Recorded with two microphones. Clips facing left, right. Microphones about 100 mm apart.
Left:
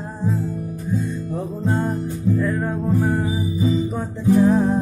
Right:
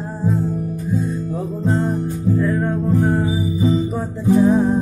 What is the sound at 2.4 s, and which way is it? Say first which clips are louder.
Music: right 3 dB; centre (ahead or behind).